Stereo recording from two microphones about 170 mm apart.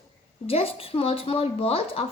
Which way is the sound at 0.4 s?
35° left (ahead or behind).